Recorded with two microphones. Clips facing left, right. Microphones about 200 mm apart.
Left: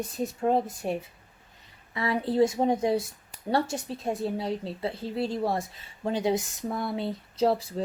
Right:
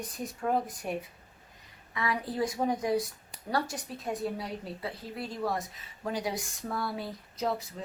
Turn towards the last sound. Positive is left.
turn(degrees=30)  # may be behind; listen again after turning